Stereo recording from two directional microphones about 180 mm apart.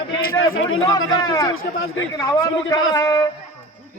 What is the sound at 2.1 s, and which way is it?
Speech, 20° left (ahead or behind).